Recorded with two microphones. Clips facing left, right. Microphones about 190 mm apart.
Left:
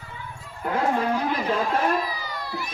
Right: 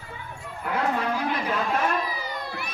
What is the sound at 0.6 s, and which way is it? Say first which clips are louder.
Speech: left 3 dB; 30° left (ahead or behind).